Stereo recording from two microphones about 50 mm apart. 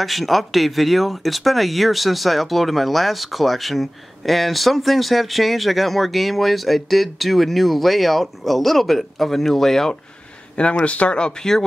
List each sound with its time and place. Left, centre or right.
0.0 s speech: centre
10.6 s speech: left